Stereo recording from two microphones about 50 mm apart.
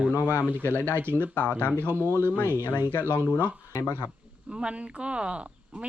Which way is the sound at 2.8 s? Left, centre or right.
Right.